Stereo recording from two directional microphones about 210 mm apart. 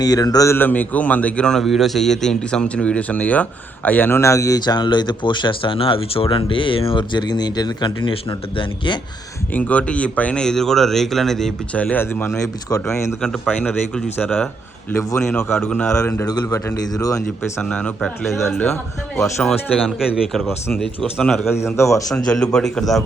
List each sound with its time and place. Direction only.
0.0 s a man's voice: 20° left (ahead or behind)
9.5 s speech: 5° left (ahead or behind)
13.1 s a man's voice: centre (ahead or behind); by 17.2 s 15° left (ahead or behind)
17.6 s speech: 5° left (ahead or behind)
21.5 s speech: 10° left (ahead or behind)